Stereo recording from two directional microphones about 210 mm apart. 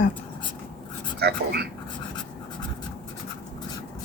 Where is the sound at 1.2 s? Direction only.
50° right (ahead or behind).